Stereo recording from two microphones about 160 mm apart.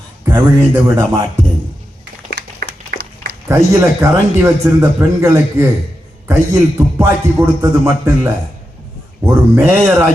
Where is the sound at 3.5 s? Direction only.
15° right (ahead or behind).